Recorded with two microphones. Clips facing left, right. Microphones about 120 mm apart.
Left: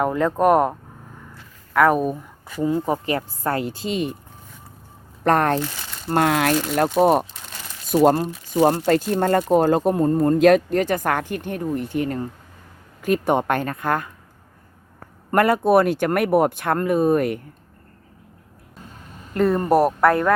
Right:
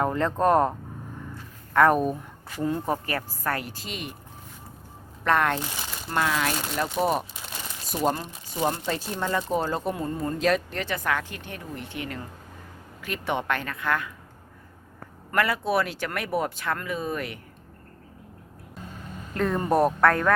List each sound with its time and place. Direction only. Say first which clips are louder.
0.0 s speech: left 5 dB; 10° left (ahead or behind)
2.8 s speech: left 5 dB; 20° left (ahead or behind)
5.2 s speech: left 5 dB; 40° left (ahead or behind)
6.1 s speech: left 7 dB; 55° left (ahead or behind)
8.9 s speech: left 10 dB; 55° left (ahead or behind)
15.4 s speech: left 8 dB; 50° left (ahead or behind)
19.3 s speech: left 6 dB; 5° left (ahead or behind)